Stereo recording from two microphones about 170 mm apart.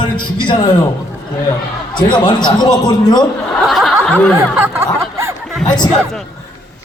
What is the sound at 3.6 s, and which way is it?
Snicker, centre (ahead or behind).